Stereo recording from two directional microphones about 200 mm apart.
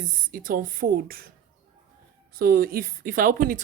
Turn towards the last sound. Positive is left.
turn(degrees=-40)  # may be behind; listen again after turning